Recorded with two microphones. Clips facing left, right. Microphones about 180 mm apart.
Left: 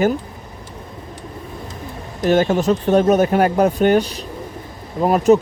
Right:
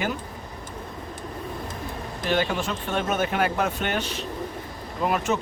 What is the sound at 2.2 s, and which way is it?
Speech, 45° left (ahead or behind).